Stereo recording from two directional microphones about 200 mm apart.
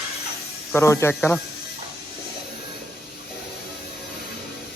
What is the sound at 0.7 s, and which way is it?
Speech, 15° left (ahead or behind).